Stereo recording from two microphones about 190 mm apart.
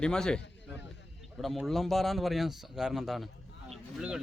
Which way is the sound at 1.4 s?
Centre (ahead or behind).